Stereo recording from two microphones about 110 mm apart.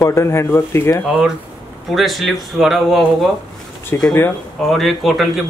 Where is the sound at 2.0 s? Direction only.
Centre (ahead or behind).